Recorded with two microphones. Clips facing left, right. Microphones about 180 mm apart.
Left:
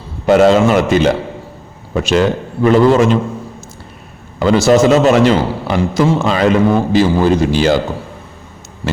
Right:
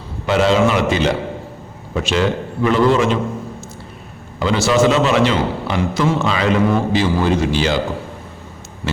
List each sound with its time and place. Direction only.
0.3 s a man's voice: 50° left (ahead or behind)
4.4 s a man's voice: 45° left (ahead or behind)